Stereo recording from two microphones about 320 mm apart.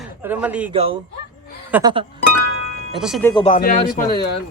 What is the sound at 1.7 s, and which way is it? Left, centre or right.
Music, centre.